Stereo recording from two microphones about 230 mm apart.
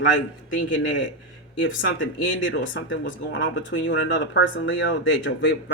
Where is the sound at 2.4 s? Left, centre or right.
Left.